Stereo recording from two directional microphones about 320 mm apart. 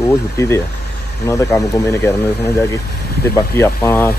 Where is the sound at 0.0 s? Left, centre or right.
Centre.